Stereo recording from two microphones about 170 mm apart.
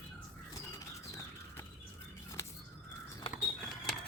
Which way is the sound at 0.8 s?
20° left (ahead or behind).